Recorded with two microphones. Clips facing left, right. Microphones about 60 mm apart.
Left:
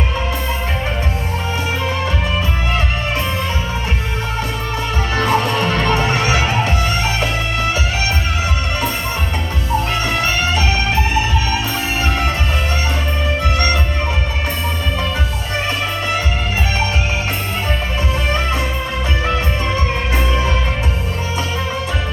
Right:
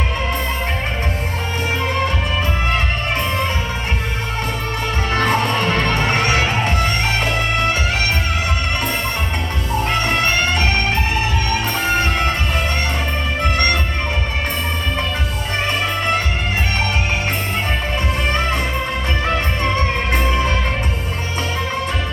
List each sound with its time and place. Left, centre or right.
5.1 s music: right
9.9 s music: right
19.6 s music: right